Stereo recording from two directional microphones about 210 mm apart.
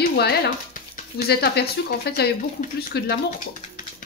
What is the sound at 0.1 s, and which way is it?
Speech, 50° left (ahead or behind).